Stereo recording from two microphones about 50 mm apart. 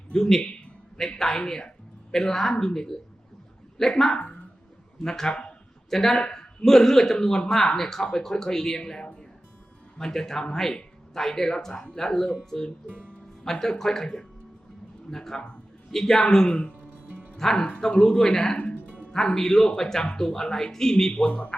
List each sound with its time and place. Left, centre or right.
0.1 s speech: centre
4.2 s a sound: left
5.0 s speech: centre
8.8 s a sound: centre
10.0 s speech: centre
16.5 s speech: left
17.3 s speech: centre
21.2 s speech: left